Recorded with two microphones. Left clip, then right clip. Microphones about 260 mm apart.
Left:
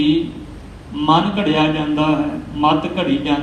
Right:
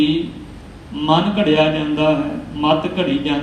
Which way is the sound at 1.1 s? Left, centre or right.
Left.